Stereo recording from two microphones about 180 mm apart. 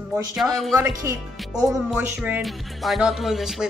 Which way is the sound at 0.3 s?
Centre (ahead or behind).